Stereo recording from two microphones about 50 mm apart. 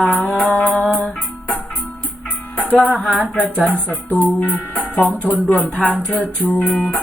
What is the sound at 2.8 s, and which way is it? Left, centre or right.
Music, left.